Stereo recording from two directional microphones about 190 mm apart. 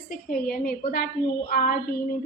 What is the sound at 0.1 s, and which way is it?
A woman's voice, 50° left (ahead or behind).